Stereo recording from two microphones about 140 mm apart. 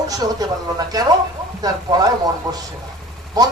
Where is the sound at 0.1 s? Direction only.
25° right (ahead or behind).